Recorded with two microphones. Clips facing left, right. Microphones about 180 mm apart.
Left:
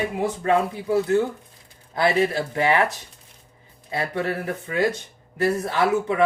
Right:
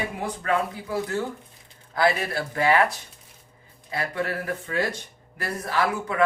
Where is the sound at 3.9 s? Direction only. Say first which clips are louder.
Left 3 dB; 25° left (ahead or behind).